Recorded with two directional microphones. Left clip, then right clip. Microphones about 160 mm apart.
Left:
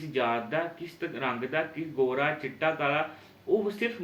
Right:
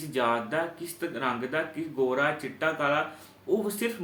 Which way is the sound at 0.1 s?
35° right (ahead or behind).